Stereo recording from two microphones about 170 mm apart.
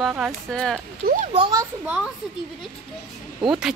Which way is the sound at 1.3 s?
30° right (ahead or behind).